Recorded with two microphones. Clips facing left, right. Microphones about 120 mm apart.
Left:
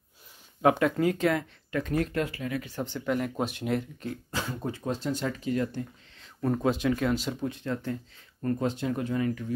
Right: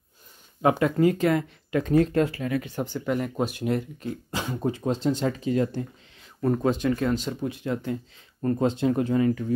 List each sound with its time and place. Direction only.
0.6 s speech: centre (ahead or behind)
1.7 s speech: 30° right (ahead or behind)
2.8 s speech: 5° right (ahead or behind)
4.3 s speech: 20° right (ahead or behind)
6.1 s speech: centre (ahead or behind)
8.4 s speech: 25° right (ahead or behind)